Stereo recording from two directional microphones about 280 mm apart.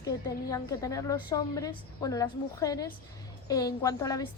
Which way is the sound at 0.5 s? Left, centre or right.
Centre.